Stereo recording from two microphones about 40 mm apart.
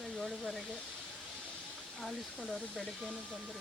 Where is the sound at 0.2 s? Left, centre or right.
Centre.